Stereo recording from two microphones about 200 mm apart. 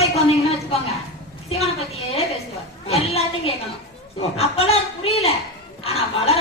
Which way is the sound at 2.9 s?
30° left (ahead or behind).